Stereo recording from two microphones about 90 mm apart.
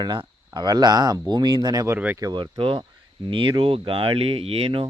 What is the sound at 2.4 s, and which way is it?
Speech, 75° right (ahead or behind).